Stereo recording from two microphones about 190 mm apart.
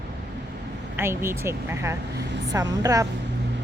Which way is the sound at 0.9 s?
10° right (ahead or behind).